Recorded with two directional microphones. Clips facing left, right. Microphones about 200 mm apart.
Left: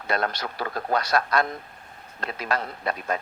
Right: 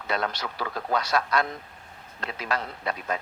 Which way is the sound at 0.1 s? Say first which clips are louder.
Left 2 dB; 50° left (ahead or behind).